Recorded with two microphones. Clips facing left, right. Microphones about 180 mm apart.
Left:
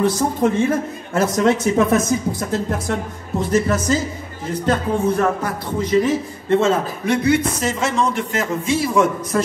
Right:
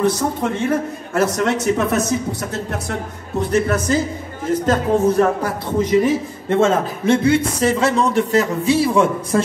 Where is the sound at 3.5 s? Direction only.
60° right (ahead or behind).